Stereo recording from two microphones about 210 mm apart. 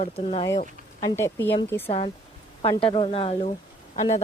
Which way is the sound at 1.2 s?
10° left (ahead or behind).